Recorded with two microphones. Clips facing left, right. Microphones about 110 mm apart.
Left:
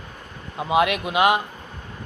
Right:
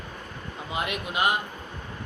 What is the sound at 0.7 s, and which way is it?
Speech, 90° left.